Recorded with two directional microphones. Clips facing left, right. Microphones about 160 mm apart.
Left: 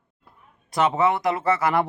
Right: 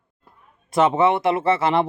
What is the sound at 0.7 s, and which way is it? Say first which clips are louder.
Speech: right 3 dB; 25° right (ahead or behind).